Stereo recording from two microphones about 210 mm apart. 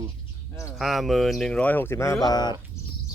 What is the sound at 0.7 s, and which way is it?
Speech, centre (ahead or behind).